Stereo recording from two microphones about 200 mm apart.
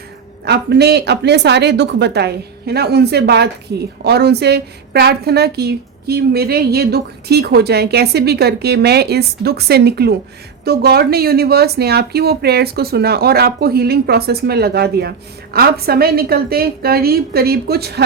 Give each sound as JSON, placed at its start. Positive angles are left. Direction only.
{"t": 0.4, "sound": "a woman's voice", "side_deg": -55}